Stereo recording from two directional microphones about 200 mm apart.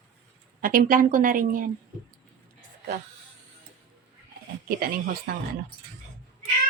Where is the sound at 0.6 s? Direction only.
45° right (ahead or behind).